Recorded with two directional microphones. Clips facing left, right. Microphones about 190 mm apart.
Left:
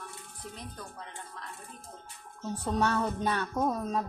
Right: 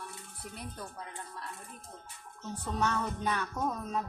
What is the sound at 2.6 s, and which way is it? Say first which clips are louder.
Speech: left 4 dB; 35° left (ahead or behind).